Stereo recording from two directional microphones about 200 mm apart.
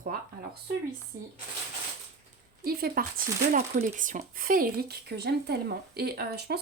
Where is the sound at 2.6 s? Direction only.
50° right (ahead or behind).